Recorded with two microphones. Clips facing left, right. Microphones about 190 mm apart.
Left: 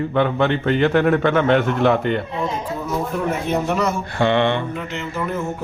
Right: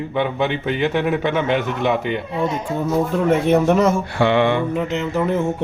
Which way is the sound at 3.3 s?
60° right (ahead or behind).